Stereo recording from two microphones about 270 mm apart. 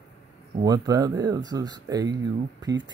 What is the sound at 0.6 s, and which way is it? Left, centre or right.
Speech, centre.